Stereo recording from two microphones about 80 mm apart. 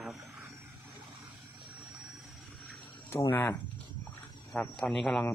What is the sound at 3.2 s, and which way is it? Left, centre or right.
Speech, left.